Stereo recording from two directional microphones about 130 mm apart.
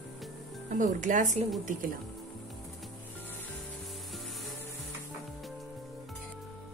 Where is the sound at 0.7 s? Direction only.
75° right (ahead or behind).